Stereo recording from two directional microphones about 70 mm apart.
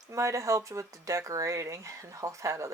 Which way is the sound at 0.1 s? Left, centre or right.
Right.